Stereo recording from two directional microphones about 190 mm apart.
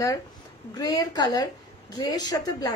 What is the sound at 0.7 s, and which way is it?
A woman's voice, 20° left (ahead or behind).